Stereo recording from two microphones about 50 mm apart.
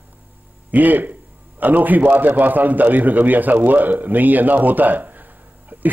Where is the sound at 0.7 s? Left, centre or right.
Right.